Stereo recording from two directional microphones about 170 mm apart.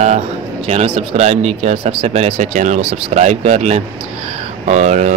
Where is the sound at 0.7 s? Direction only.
40° right (ahead or behind).